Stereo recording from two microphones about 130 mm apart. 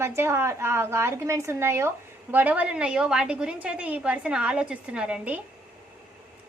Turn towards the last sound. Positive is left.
turn(degrees=-10)  # may be behind; listen again after turning